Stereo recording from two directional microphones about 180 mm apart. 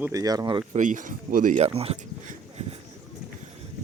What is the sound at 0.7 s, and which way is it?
Speech, 45° right (ahead or behind).